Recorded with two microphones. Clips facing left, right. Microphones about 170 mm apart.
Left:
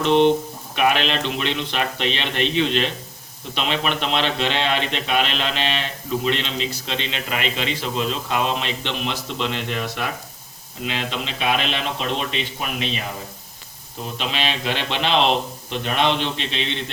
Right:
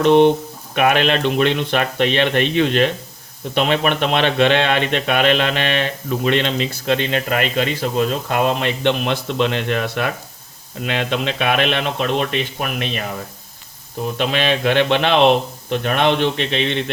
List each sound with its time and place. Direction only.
0.0 s a man's voice: 50° right (ahead or behind)
14.2 s a man's voice: 55° right (ahead or behind)